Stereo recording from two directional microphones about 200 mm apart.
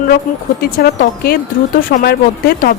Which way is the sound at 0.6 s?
50° left (ahead or behind).